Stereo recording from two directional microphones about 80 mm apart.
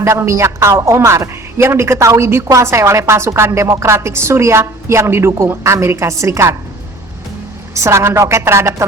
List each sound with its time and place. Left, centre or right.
0.0 s a woman's voice: right
7.8 s a woman's voice: right